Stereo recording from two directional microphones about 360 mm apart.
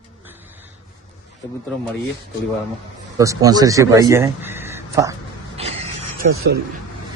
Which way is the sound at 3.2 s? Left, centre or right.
Centre.